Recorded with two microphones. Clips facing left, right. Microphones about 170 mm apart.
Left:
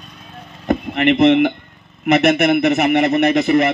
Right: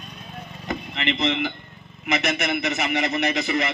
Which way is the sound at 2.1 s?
60° left (ahead or behind).